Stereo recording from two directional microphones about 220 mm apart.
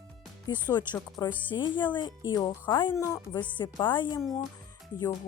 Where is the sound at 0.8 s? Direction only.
20° left (ahead or behind).